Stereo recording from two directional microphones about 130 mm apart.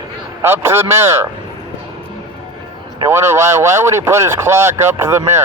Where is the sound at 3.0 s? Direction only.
20° right (ahead or behind).